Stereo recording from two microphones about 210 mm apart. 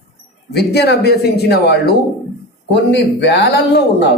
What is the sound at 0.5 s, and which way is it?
Speech, 50° left (ahead or behind).